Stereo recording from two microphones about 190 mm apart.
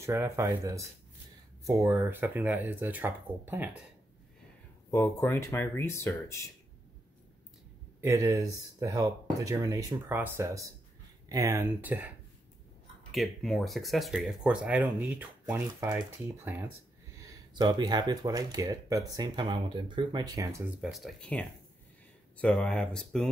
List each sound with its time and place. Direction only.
0.0 s speech: 15° right (ahead or behind)
4.9 s speech: 15° left (ahead or behind)
8.0 s speech: 15° right (ahead or behind)
13.1 s speech: centre (ahead or behind)
17.2 s speech: 20° right (ahead or behind)
20.8 s speech: centre (ahead or behind)